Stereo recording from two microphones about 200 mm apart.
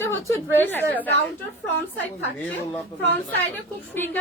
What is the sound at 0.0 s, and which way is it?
A woman's voice, 10° left (ahead or behind).